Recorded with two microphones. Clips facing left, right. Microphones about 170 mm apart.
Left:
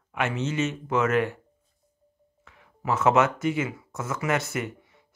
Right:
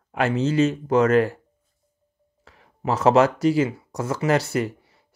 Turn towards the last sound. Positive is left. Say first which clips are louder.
# right 7 dB
turn(degrees=-35)  # may be behind; listen again after turning